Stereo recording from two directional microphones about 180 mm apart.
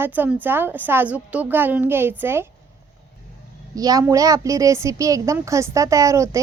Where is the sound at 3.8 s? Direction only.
20° right (ahead or behind).